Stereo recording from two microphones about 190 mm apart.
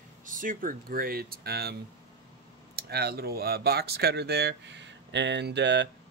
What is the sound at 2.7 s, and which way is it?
Speech, 55° right (ahead or behind).